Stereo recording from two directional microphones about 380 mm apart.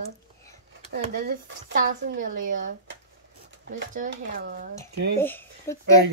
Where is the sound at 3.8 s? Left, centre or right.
Right.